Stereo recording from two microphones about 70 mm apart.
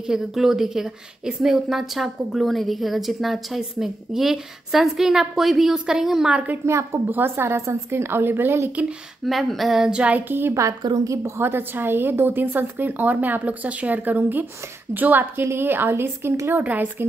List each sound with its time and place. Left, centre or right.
0.0 s a woman's voice: centre
6.6 s a woman's voice: right
9.2 s a woman's voice: centre; by 10.5 s right
11.1 s a woman's voice: right